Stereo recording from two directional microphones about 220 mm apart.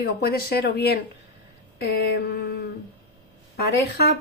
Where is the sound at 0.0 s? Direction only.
45° left (ahead or behind).